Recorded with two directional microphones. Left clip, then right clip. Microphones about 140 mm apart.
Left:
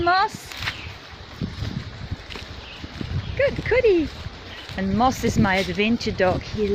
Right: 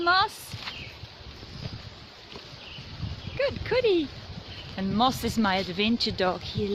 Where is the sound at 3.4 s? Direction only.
15° right (ahead or behind).